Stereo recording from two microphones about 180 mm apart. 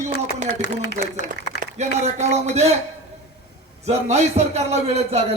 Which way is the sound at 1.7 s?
40° right (ahead or behind).